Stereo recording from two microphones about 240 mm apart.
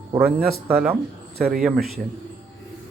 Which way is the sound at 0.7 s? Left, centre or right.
Centre.